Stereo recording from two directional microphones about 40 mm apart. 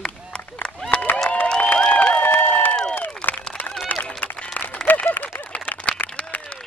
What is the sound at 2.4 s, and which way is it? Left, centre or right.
Crowd, left.